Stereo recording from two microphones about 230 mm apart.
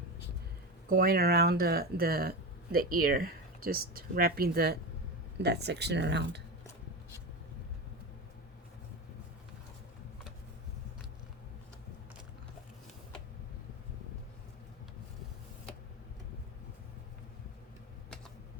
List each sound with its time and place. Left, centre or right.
0.9 s speech: right